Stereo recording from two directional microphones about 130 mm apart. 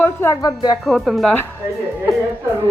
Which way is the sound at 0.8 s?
Centre (ahead or behind).